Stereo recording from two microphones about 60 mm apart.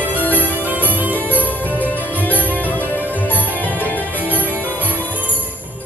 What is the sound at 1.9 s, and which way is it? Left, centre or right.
Music, left.